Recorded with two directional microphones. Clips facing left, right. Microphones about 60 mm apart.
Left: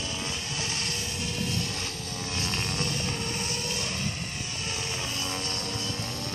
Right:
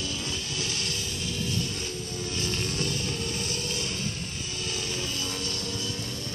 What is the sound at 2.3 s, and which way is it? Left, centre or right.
Music, left.